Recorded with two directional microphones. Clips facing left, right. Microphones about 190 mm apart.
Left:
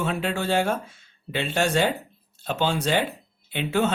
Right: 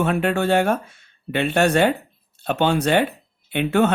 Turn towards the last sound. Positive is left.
turn(degrees=-60)  # may be behind; listen again after turning